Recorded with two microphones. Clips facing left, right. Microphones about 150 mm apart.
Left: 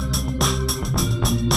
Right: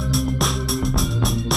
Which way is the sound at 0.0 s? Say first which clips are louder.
Right 2 dB; centre (ahead or behind).